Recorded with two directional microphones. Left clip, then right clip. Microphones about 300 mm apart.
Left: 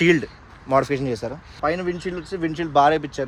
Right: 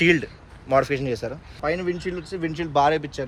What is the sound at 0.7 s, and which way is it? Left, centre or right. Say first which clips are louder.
Speech: left 1 dB; left.